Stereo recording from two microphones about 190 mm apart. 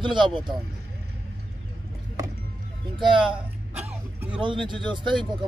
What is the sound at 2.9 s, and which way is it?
Speech, 25° right (ahead or behind).